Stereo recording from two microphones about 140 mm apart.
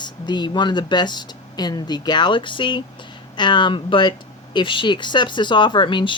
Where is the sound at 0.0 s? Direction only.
30° left (ahead or behind).